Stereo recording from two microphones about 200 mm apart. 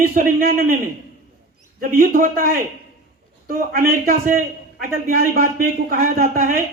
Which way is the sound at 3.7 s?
50° right (ahead or behind).